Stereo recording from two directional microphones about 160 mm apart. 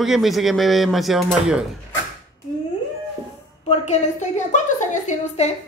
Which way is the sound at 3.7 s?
45° left (ahead or behind).